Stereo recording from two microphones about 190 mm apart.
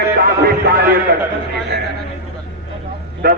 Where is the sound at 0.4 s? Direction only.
55° right (ahead or behind).